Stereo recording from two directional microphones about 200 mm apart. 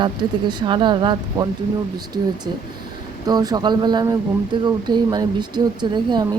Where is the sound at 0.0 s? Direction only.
20° right (ahead or behind).